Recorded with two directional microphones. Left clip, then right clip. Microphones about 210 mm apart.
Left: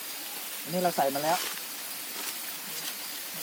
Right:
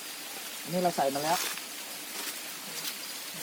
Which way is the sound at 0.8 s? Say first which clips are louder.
Left 1 dB; 15° left (ahead or behind).